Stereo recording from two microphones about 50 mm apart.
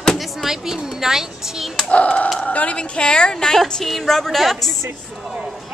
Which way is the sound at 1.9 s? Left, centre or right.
Left.